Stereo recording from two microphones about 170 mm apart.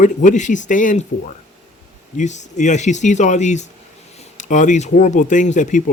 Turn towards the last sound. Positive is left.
turn(degrees=45)  # may be behind; listen again after turning